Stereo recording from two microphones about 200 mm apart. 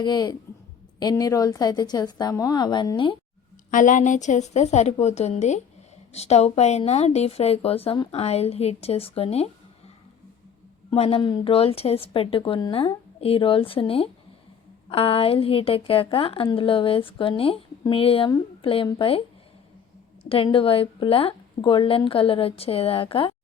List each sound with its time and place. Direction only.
0.0 s a woman's voice: 20° left (ahead or behind)
3.7 s a woman's voice: 40° left (ahead or behind)
10.9 s a woman's voice: 30° left (ahead or behind)
20.2 s a woman's voice: 25° left (ahead or behind)